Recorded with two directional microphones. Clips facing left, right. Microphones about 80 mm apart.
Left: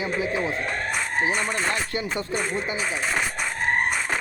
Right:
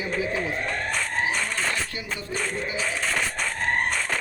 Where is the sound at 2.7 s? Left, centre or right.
Centre.